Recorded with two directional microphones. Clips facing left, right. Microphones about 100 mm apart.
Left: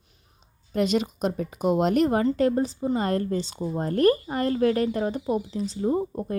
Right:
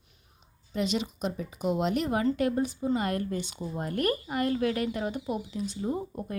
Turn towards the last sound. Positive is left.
turn(degrees=35)  # may be behind; listen again after turning